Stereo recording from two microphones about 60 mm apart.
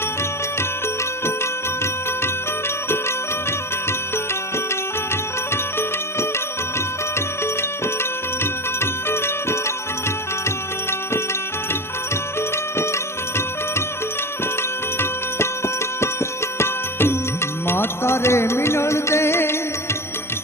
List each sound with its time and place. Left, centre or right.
5.5 s music: left
8.8 s music: left
12.7 s music: left
14.9 s music: left